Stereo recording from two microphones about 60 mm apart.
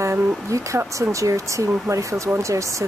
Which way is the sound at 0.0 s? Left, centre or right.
Right.